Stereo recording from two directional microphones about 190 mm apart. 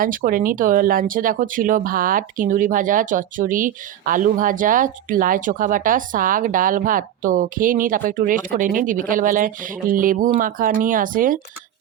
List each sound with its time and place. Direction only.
0.0 s speech: 45° right (ahead or behind)